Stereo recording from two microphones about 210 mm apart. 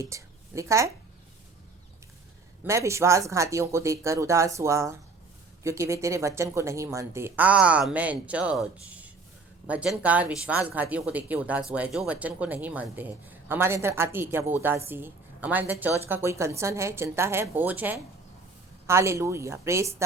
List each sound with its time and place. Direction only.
0.0 s a woman's voice: 15° right (ahead or behind)
2.6 s a woman's voice: 15° right (ahead or behind)